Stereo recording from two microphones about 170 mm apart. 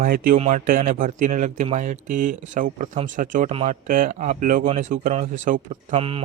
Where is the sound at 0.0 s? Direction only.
55° right (ahead or behind).